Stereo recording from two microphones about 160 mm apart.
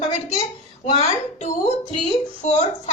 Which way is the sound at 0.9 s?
40° left (ahead or behind).